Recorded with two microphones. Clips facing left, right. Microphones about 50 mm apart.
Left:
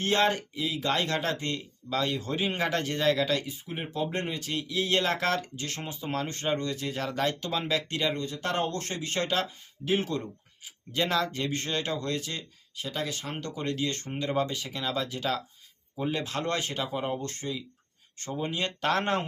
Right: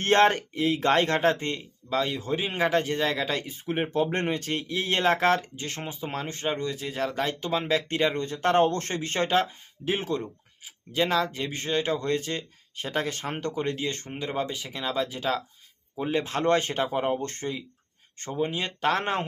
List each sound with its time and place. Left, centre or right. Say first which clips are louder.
0.0 s speech: right 5 dB; right; by 3.2 s centre
3.2 s speech: left 1 dB; right
3.7 s speech: right 7 dB; right; by 7.3 s centre
7.7 s speech: right 5 dB; right
10.9 s speech: right 3 dB; centre; by 13.3 s right
13.3 s speech: right 3 dB; right
18.3 s speech: right 3 dB; centre